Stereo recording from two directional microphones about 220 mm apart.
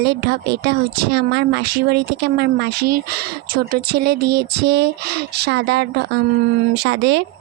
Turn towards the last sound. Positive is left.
turn(degrees=-50)  # may be behind; listen again after turning